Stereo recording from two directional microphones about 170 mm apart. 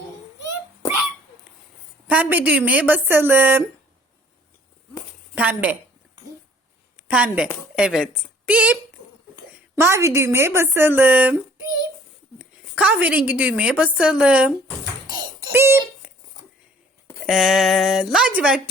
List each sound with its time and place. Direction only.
2.0 s a woman's voice: 10° right (ahead or behind)
5.3 s a woman's voice: 10° right (ahead or behind)
7.1 s a woman's voice: 5° right (ahead or behind)
12.4 s a woman's voice: 5° right (ahead or behind)
15.0 s a sound: 25° right (ahead or behind)
15.5 s a woman's voice: 15° right (ahead or behind)
17.2 s speech: 5° right (ahead or behind)